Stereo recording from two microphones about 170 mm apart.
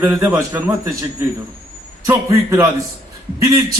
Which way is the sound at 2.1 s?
20° right (ahead or behind).